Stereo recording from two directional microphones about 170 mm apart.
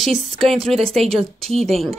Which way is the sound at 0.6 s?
35° right (ahead or behind).